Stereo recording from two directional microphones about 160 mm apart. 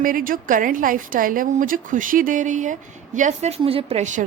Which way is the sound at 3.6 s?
35° right (ahead or behind).